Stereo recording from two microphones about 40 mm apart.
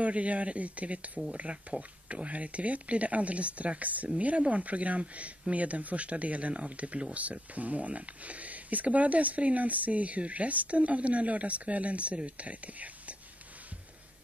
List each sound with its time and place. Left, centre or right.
0.0 s speech: right